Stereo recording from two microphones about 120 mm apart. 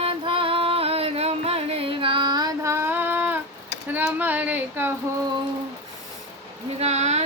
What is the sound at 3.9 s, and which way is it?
Speech, 15° right (ahead or behind).